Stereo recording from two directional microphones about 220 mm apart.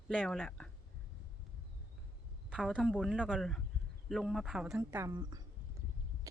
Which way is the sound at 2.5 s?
Centre (ahead or behind).